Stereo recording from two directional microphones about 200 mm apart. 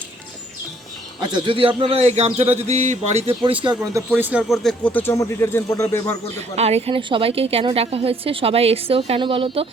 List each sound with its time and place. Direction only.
1.3 s a man's voice: 25° right (ahead or behind)
3.9 s speech: 10° right (ahead or behind); by 6.1 s 15° left (ahead or behind)
6.6 s a woman's voice: 30° right (ahead or behind)